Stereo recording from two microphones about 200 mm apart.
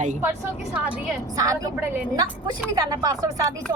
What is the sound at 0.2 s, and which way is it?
Speech, 5° right (ahead or behind).